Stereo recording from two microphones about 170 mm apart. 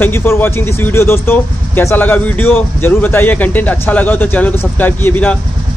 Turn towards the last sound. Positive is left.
turn(degrees=10)  # may be behind; listen again after turning